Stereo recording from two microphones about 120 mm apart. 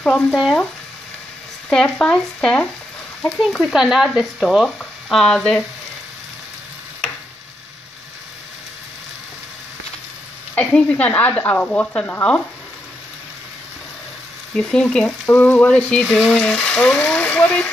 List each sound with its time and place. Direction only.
0.0 s speech: 5° left (ahead or behind)
1.7 s frying: 5° left (ahead or behind)
3.2 s speech: centre (ahead or behind)
10.5 s frying: 10° left (ahead or behind)
14.6 s speech: 5° left (ahead or behind)
15.2 s frying: 15° left (ahead or behind)